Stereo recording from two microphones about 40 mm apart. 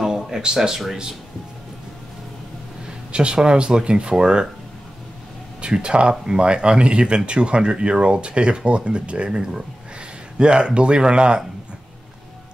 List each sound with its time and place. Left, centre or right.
0.0 s a sound: centre
0.6 s speech: centre
3.1 s speech: right
5.6 s speech: right
10.4 s speech: right